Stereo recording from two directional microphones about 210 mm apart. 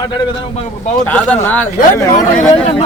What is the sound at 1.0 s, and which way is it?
Speech, 5° left (ahead or behind).